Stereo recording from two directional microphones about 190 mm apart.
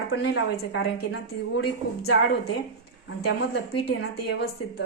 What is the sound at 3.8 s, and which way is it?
Speech, 60° left (ahead or behind).